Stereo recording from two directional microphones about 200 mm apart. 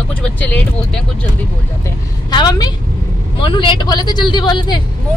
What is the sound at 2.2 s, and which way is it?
A woman's voice, 20° left (ahead or behind).